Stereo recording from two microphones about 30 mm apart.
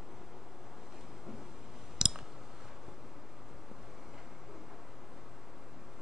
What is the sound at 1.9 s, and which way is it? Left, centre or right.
Clicking, centre.